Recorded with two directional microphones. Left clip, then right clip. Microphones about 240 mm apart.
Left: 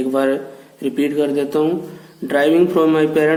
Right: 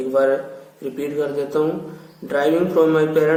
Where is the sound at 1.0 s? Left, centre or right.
Left.